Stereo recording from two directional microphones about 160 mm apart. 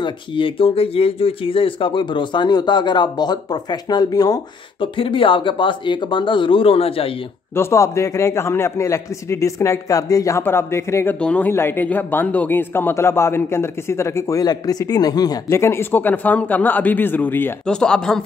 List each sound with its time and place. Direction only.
0.0 s speech: 35° left (ahead or behind)
7.5 s speech: 20° left (ahead or behind)